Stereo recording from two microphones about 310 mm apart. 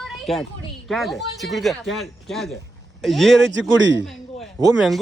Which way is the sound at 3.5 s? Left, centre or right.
Right.